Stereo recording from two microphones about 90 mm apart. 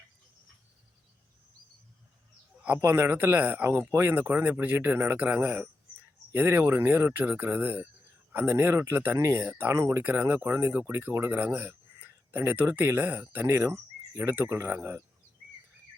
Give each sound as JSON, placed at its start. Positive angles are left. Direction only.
{"t": 2.6, "sound": "speech", "side_deg": -20}